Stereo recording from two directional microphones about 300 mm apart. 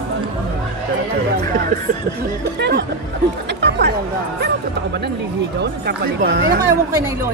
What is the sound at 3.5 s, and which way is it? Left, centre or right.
Chatter, right.